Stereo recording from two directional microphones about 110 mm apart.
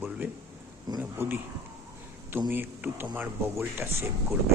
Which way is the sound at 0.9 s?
40° right (ahead or behind).